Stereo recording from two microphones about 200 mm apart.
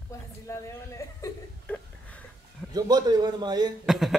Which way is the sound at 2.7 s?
20° right (ahead or behind).